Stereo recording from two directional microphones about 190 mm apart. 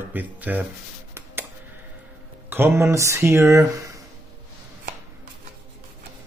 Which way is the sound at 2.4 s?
10° right (ahead or behind).